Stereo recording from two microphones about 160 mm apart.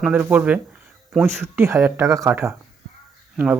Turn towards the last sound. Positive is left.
turn(degrees=-10)  # may be behind; listen again after turning